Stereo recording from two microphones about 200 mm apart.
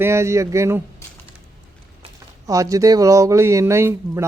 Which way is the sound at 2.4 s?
15° right (ahead or behind).